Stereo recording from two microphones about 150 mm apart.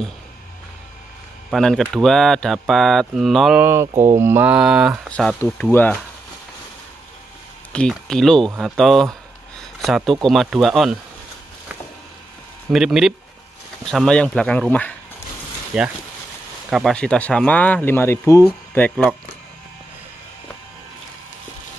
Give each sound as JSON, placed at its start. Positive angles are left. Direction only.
{"t": 1.5, "sound": "speech", "side_deg": 0}
{"t": 3.6, "sound": "mantra", "side_deg": -15}
{"t": 5.1, "sound": "speech", "side_deg": 5}
{"t": 7.7, "sound": "speech", "side_deg": 5}
{"t": 9.6, "sound": "a sound", "side_deg": 0}
{"t": 10.2, "sound": "speech", "side_deg": 0}
{"t": 12.7, "sound": "speech", "side_deg": -5}
{"t": 15.7, "sound": "speech", "side_deg": -5}